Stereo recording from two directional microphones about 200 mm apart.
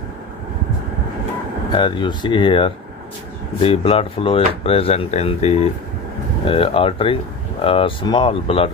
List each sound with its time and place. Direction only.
1.7 s speech: 25° left (ahead or behind)